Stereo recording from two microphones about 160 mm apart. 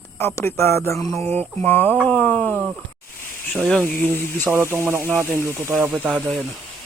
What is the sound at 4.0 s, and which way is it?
Speech, 10° left (ahead or behind).